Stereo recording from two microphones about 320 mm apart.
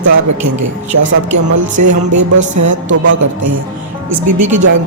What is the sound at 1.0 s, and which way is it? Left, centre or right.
Speech, right.